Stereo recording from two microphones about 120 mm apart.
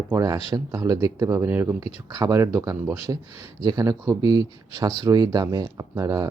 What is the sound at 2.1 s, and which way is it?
Speech, 30° right (ahead or behind).